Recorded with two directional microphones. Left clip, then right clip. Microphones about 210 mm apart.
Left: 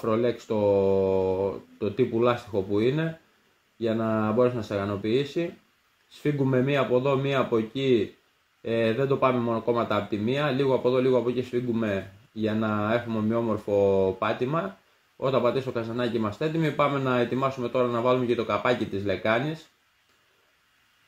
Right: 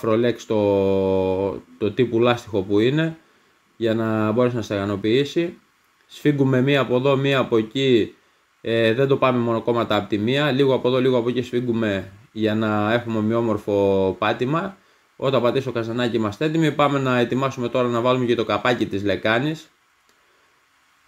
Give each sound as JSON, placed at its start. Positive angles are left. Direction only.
{"t": 0.0, "sound": "speech", "side_deg": -25}